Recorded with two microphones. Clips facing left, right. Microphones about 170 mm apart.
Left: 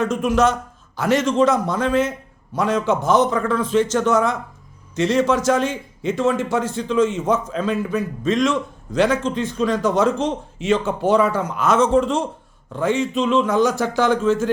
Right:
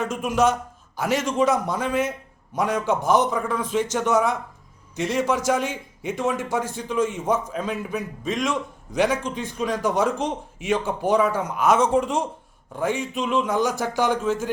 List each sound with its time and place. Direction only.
0.0 s a man's voice: 10° right (ahead or behind)
11.1 s speech: 70° left (ahead or behind)
11.4 s a man's voice: 15° right (ahead or behind)